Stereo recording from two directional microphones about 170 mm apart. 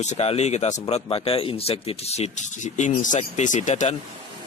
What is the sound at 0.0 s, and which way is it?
Speech, 40° left (ahead or behind).